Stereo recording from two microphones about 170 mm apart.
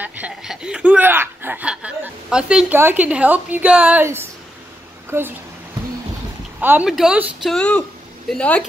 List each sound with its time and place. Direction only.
0.0 s speech: 5° right (ahead or behind)
6.6 s speech: 10° right (ahead or behind)
7.5 s speech: 5° left (ahead or behind)